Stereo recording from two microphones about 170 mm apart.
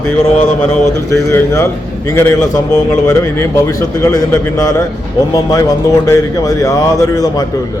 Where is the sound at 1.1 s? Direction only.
15° left (ahead or behind).